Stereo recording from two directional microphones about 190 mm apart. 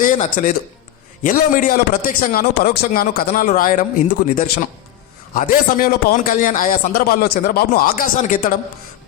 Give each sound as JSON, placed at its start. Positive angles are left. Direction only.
{"t": 0.0, "sound": "a man's voice", "side_deg": 45}